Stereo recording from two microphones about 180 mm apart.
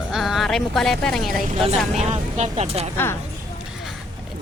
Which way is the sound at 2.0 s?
40° right (ahead or behind).